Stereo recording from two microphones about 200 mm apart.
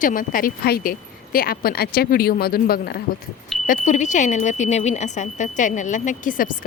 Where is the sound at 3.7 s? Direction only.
35° left (ahead or behind).